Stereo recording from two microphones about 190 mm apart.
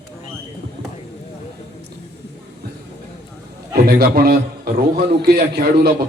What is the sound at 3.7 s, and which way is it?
A man's voice, 55° right (ahead or behind).